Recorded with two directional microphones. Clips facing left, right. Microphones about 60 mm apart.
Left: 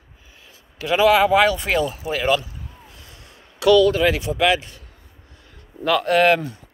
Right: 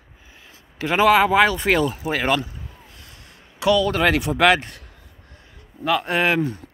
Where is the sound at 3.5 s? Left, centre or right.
Right.